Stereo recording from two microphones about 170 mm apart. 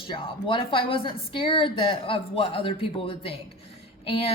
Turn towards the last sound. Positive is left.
turn(degrees=35)  # may be behind; listen again after turning